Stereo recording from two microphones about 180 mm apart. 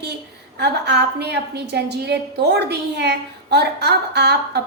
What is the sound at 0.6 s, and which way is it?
A woman's voice, 70° right (ahead or behind).